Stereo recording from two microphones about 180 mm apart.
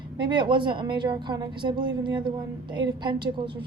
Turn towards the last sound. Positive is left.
turn(degrees=-25)  # may be behind; listen again after turning